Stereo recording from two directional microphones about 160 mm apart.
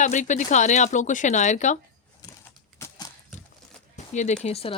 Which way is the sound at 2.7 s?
20° left (ahead or behind).